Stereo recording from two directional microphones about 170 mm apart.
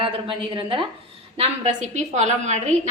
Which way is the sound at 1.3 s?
40° right (ahead or behind).